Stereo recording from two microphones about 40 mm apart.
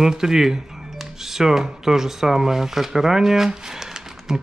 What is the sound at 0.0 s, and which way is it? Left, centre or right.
Speech, centre.